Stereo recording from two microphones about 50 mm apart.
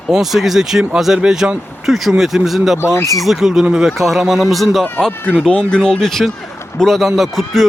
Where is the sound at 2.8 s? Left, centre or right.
Left.